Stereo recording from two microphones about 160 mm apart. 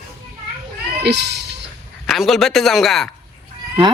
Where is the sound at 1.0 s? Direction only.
90° right.